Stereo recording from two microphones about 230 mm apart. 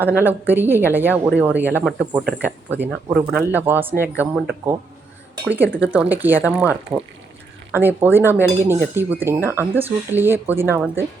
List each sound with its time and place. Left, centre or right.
0.0 s speech: centre